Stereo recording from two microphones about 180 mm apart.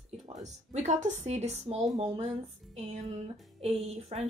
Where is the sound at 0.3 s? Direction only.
40° right (ahead or behind).